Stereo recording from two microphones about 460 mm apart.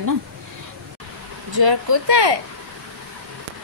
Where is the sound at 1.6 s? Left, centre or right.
Right.